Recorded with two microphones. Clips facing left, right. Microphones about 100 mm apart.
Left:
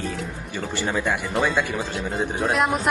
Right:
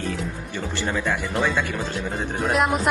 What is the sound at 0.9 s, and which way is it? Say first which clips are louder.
Speech: left 1 dB; 10° left (ahead or behind).